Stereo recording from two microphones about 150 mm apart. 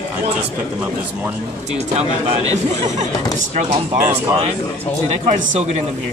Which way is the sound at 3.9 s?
15° right (ahead or behind).